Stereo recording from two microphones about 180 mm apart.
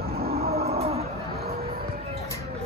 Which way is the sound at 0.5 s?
35° right (ahead or behind).